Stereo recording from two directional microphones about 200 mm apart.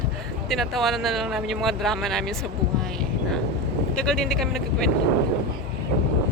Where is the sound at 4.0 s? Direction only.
5° left (ahead or behind).